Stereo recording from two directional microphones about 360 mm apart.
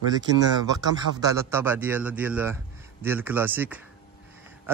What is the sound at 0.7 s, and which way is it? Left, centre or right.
Speech, centre.